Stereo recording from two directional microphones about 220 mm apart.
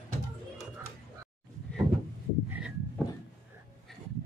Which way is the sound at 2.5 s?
5° right (ahead or behind).